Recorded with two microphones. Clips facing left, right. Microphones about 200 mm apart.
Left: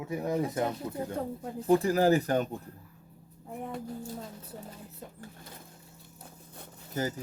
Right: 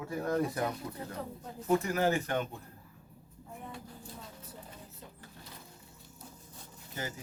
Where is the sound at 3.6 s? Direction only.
50° left (ahead or behind).